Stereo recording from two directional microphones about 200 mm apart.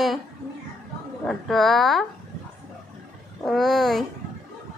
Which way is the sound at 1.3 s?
Centre (ahead or behind).